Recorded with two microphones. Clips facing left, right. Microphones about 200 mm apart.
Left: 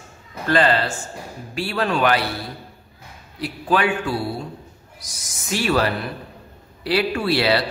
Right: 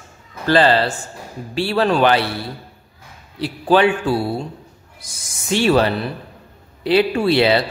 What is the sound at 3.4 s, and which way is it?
A man's voice, 30° right (ahead or behind).